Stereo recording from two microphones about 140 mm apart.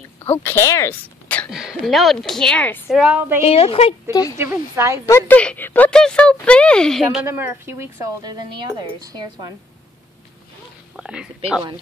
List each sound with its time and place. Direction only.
0.2 s a woman's voice: 15° left (ahead or behind)
1.5 s a woman's voice: 5° right (ahead or behind)
2.9 s speech: 10° right (ahead or behind)
3.4 s speech: 45° left (ahead or behind)
4.4 s speech: 20° right (ahead or behind)
5.0 s a woman's voice: 20° left (ahead or behind); by 7.2 s centre (ahead or behind)
7.2 s a woman's voice: 15° right (ahead or behind); by 9.5 s 30° right (ahead or behind)
11.0 s a woman's voice: 5° right (ahead or behind)